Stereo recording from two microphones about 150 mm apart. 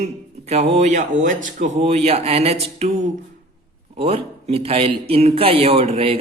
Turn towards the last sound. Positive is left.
turn(degrees=-40)  # may be behind; listen again after turning